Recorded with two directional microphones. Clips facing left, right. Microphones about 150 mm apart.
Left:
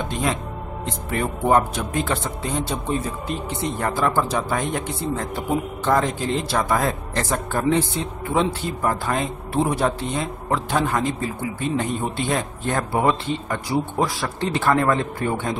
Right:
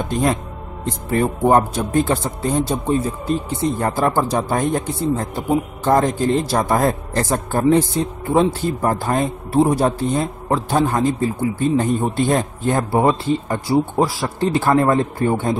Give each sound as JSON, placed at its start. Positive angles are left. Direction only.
{"t": 0.1, "sound": "speech", "side_deg": -40}